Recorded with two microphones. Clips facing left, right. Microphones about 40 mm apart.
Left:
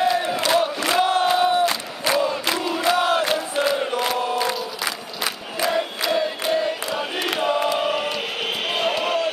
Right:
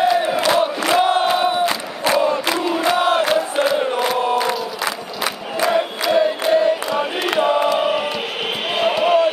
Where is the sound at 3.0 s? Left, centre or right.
Right.